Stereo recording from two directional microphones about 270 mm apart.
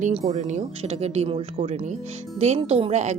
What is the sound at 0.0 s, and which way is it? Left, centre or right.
A woman's voice, right.